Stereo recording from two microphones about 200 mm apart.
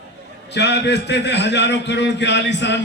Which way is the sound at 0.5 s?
60° left (ahead or behind).